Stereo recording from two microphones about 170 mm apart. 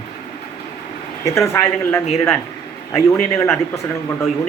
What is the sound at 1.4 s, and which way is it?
Speech, 15° left (ahead or behind).